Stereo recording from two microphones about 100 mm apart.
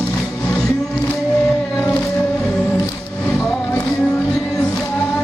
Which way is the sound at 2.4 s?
10° left (ahead or behind).